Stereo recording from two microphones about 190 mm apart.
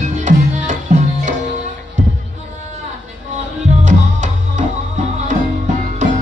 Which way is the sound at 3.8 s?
40° right (ahead or behind).